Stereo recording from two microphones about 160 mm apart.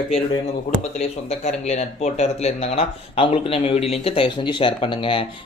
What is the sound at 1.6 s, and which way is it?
Speech, 45° left (ahead or behind).